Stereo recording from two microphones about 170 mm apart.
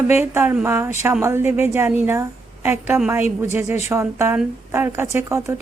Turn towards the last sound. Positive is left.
turn(degrees=-15)  # may be behind; listen again after turning